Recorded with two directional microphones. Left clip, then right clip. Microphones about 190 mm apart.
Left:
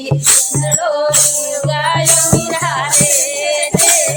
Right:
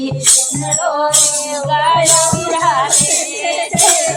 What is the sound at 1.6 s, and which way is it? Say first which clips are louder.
Music: right 4 dB; 55° left (ahead or behind).